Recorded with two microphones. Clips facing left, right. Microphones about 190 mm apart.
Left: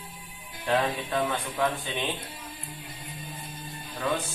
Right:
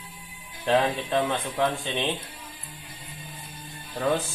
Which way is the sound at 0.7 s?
25° right (ahead or behind).